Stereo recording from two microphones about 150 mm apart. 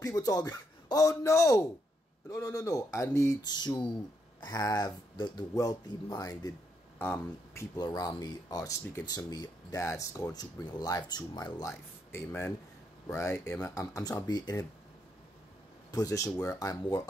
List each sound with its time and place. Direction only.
0.0 s a man's voice: 25° left (ahead or behind)
7.0 s speech: 15° left (ahead or behind)
7.7 s speech: 25° left (ahead or behind)
12.1 s speech: 15° left (ahead or behind)
15.9 s speech: 20° left (ahead or behind)